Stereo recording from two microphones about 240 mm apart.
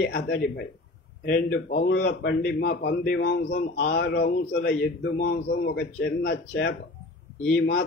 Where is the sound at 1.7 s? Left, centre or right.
Left.